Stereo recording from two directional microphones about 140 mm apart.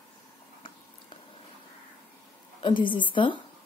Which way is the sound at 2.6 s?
35° left (ahead or behind).